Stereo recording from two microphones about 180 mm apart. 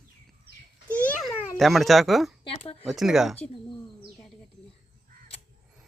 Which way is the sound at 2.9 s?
Centre (ahead or behind).